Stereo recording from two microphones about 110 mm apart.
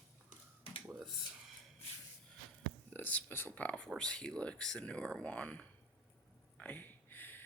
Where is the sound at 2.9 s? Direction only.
15° left (ahead or behind).